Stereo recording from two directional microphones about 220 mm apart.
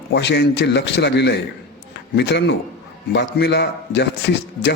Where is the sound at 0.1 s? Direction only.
50° left (ahead or behind).